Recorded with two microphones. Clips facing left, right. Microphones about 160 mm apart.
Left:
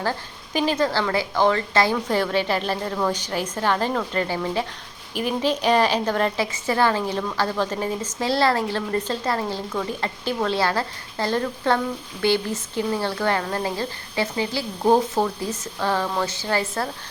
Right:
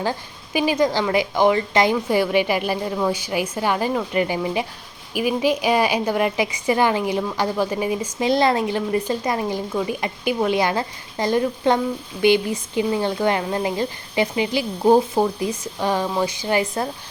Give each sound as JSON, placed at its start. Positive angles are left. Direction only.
{"t": 0.0, "sound": "a woman's voice", "side_deg": -15}